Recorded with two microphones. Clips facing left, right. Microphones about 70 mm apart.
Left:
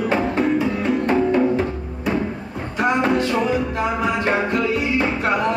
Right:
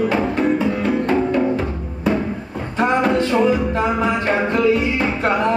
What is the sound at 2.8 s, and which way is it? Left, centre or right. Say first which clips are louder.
Music: right 2 dB; right.